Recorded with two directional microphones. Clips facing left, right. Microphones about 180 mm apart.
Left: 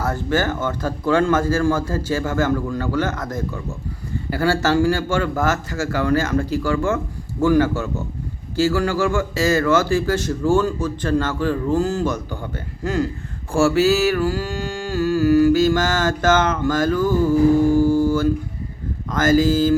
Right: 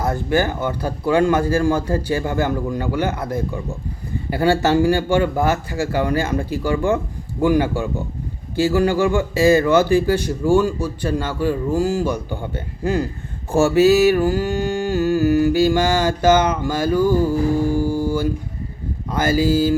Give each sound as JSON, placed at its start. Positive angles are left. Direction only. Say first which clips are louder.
{"t": 0.0, "sound": "speech", "louder": "right 2 dB", "side_deg": -15}
{"t": 17.7, "sound": "a sound", "louder": "left 4 dB", "side_deg": -10}
{"t": 19.1, "sound": "speech", "louder": "left 1 dB", "side_deg": -10}